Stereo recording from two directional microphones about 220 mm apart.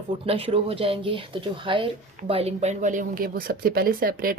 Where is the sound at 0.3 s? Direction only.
25° right (ahead or behind).